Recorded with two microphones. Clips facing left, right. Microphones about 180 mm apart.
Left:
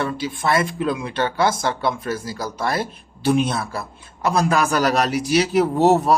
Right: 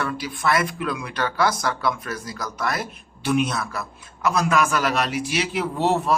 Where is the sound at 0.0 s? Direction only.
25° left (ahead or behind).